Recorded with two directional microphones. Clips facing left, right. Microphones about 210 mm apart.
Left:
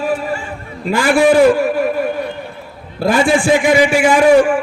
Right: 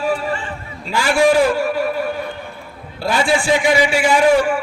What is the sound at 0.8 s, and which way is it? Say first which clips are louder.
Speech: left 4 dB; 55° left (ahead or behind).